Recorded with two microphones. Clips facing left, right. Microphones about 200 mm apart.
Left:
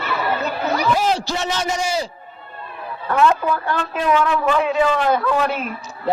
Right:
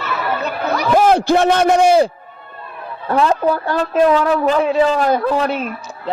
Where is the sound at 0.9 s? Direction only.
55° right (ahead or behind).